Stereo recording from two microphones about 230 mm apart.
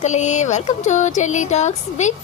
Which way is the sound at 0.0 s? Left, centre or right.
Left.